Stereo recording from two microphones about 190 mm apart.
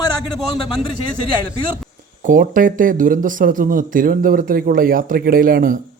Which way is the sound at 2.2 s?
45° right (ahead or behind).